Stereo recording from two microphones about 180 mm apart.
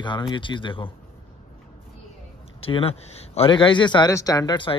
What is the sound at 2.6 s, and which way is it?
Speech, 30° left (ahead or behind).